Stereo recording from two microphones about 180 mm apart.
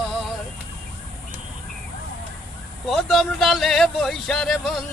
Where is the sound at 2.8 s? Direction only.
Centre (ahead or behind).